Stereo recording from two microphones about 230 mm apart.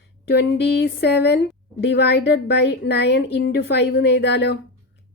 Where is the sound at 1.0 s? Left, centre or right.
Left.